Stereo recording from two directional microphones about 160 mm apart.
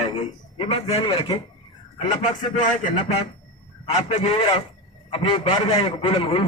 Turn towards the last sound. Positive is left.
turn(degrees=35)  # may be behind; listen again after turning